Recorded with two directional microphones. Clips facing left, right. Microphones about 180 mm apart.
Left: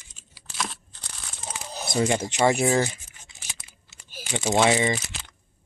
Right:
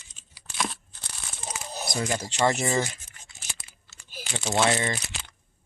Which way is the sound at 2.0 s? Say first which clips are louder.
Left 5 dB; 20° left (ahead or behind).